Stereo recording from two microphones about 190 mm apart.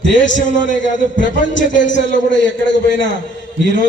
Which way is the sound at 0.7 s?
40° left (ahead or behind).